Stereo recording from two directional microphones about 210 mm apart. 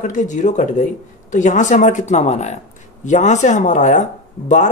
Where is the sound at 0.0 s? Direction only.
35° left (ahead or behind).